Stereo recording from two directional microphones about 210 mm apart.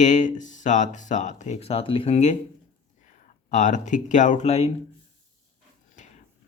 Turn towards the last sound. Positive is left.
turn(degrees=30)  # may be behind; listen again after turning